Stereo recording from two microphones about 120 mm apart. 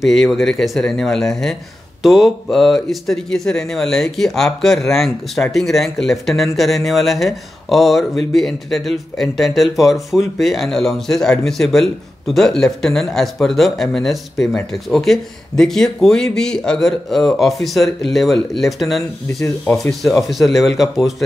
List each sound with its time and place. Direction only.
0.0 s speech: centre (ahead or behind)